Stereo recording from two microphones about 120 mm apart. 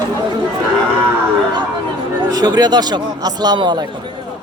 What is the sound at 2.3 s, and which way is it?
A man's voice, 35° right (ahead or behind).